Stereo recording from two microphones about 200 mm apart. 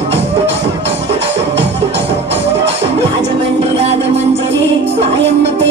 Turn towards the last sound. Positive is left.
turn(degrees=-30)  # may be behind; listen again after turning